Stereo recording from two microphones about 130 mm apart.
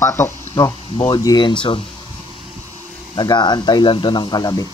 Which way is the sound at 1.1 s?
30° left (ahead or behind).